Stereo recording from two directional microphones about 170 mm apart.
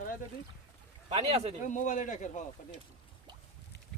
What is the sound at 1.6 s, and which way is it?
Speech, 50° left (ahead or behind).